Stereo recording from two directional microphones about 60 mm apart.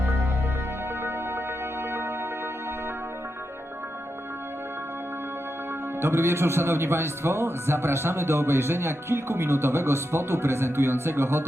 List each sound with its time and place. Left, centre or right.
6.0 s speech: right